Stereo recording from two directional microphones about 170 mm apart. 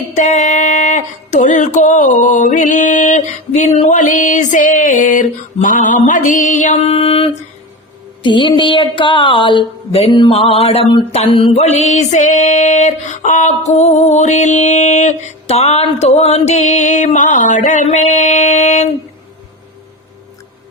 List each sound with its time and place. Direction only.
0.2 s a woman's voice: 45° left (ahead or behind)